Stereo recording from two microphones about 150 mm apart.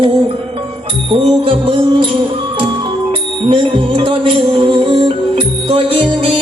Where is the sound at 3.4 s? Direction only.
35° right (ahead or behind).